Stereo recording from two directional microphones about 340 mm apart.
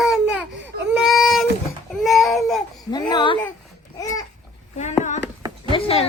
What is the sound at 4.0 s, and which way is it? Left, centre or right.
Babbling, centre.